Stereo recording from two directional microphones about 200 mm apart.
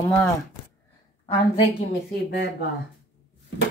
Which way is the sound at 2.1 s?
55° left (ahead or behind).